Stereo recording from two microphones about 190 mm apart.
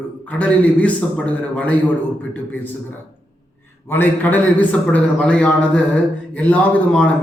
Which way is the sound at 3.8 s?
10° left (ahead or behind).